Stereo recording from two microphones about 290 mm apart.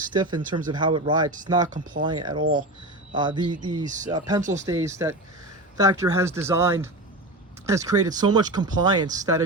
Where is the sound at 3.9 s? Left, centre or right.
Right.